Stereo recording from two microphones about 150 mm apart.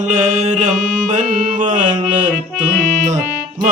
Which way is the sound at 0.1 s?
50° right (ahead or behind).